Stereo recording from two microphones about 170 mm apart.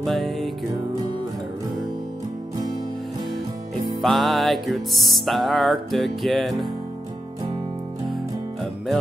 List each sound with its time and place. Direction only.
0.0 s music: centre (ahead or behind)
4.0 s music: centre (ahead or behind)